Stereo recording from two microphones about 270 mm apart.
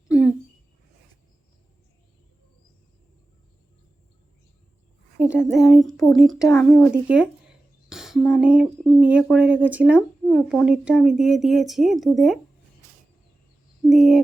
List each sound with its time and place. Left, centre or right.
0.1 s a sound: centre
5.3 s speech: centre
13.8 s speech: centre